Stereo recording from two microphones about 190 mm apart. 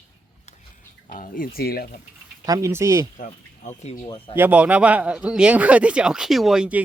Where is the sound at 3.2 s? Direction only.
40° left (ahead or behind).